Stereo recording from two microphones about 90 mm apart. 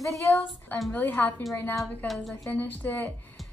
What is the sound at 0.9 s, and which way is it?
Speech, 20° left (ahead or behind).